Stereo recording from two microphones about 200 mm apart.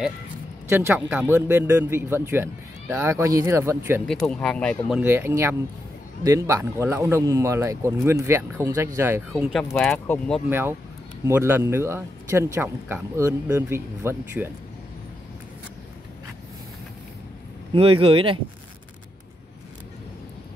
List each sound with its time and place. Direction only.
0.7 s speech: 10° right (ahead or behind)
4.1 s speech: 5° left (ahead or behind)
9.8 s speech: 5° left (ahead or behind)
10.5 s speech: 10° right (ahead or behind)
17.7 s speech: 25° right (ahead or behind)